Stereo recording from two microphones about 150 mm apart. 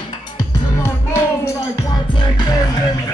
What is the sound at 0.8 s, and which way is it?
Music, 20° left (ahead or behind).